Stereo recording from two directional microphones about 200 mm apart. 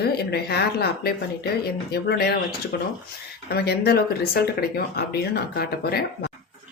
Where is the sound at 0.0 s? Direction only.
55° left (ahead or behind).